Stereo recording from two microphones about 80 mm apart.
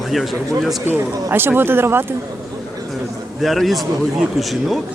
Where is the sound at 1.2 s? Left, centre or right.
Right.